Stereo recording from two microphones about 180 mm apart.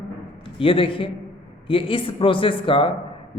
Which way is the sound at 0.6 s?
30° left (ahead or behind).